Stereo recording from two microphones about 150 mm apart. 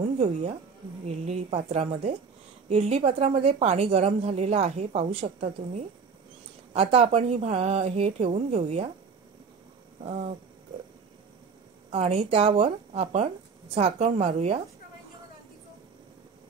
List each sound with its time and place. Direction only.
0.2 s a woman's voice: 40° right (ahead or behind)
11.9 s a woman's voice: 45° right (ahead or behind)